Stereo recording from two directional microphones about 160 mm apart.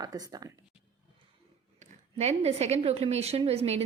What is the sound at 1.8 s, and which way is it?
A woman's voice, 45° right (ahead or behind).